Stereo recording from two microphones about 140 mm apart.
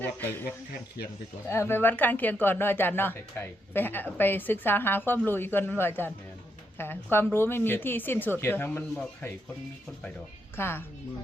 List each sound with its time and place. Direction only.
0.0 s speech: 15° left (ahead or behind)
1.5 s speech: 20° left (ahead or behind)
10.6 s speech: 15° left (ahead or behind)